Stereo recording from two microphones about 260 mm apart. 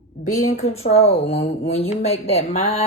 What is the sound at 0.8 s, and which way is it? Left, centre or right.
Speech, left.